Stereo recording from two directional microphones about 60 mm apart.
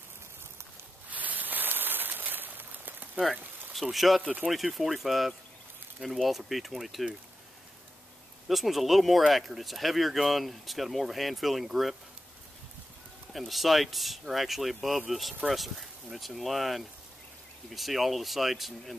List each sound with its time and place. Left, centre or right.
1.1 s a sound: right
3.2 s speech: centre
4.2 s speech: right
4.5 s speech: centre
8.5 s speech: centre
13.3 s speech: centre